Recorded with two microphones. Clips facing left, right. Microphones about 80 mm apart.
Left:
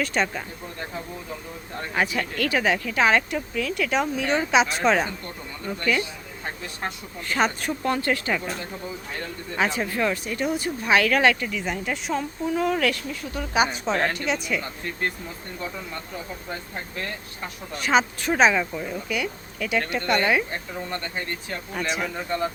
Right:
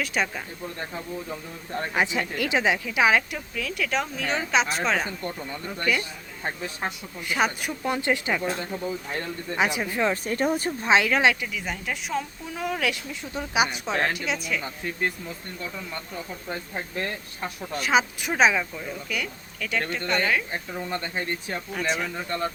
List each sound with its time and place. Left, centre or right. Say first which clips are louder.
0.0 s speech: left 2 dB; centre
1.9 s speech: left 1 dB; centre
7.3 s speech: left 2 dB; centre
7.9 s speech: left 1 dB; centre
9.6 s speech: left 1 dB; centre
10.2 s speech: right 2 dB; right
10.8 s speech: left 1 dB; right
11.4 s speech: left 3 dB; centre
12.9 s speech: left 2 dB; centre
17.7 s speech: left 1 dB; centre
20.9 s speech: right 2 dB; centre
21.7 s speech: left 1 dB; centre